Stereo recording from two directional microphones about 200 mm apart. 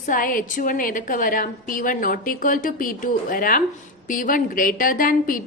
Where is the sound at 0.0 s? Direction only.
45° left (ahead or behind).